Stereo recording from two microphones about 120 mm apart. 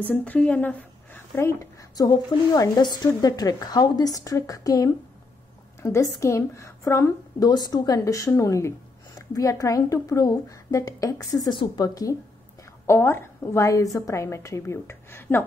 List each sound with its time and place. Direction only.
0.0 s a woman's voice: 10° left (ahead or behind)